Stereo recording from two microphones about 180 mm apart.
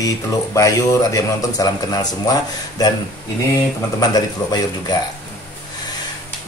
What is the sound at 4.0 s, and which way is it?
Speech, 20° left (ahead or behind).